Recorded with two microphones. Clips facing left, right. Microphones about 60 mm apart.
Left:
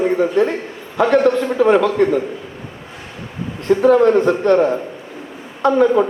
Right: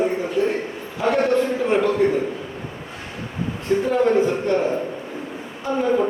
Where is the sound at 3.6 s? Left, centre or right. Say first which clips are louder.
Left 7 dB; left.